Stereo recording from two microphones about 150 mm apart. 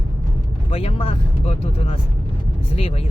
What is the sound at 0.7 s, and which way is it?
Speech, 40° left (ahead or behind).